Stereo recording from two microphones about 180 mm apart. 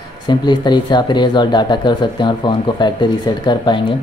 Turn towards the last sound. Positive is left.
turn(degrees=25)  # may be behind; listen again after turning